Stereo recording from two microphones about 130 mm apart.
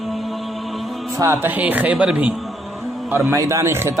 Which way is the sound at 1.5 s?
10° right (ahead or behind).